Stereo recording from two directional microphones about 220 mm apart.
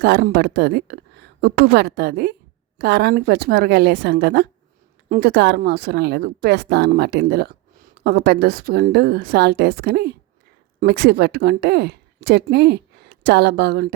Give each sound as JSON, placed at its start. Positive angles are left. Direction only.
{"t": 0.0, "sound": "a woman's voice", "side_deg": -50}